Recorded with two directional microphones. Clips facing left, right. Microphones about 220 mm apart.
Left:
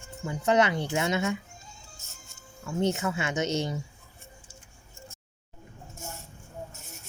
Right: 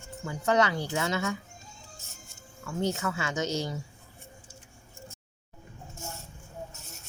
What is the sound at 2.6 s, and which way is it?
Speech, 20° left (ahead or behind).